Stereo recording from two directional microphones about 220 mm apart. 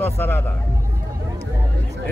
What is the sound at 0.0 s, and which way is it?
Speech, 10° left (ahead or behind).